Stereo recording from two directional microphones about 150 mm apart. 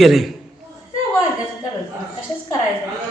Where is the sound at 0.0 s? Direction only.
Centre (ahead or behind).